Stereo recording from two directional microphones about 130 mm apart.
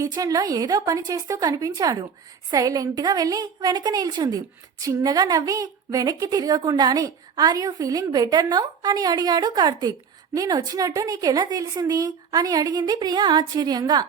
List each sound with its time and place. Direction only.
0.0 s a woman's voice: 25° right (ahead or behind)